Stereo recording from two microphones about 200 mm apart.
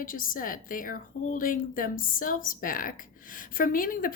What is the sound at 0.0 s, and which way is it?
A woman's voice, 45° left (ahead or behind).